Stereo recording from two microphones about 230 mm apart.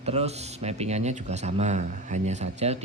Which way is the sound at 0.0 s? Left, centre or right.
Right.